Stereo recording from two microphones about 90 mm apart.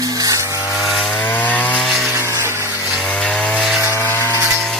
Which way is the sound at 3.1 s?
15° left (ahead or behind).